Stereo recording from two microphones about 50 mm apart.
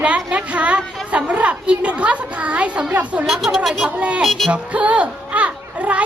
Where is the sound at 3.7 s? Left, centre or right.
Centre.